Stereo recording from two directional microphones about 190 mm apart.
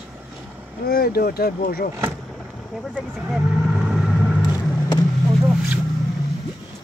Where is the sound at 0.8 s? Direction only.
55° left (ahead or behind).